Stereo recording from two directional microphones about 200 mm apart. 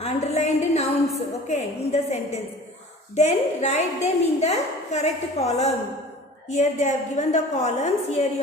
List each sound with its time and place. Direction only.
0.0 s music: 35° left (ahead or behind)
1.5 s a woman's voice: 35° left (ahead or behind)